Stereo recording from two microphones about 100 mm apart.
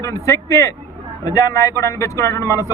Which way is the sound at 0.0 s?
30° left (ahead or behind).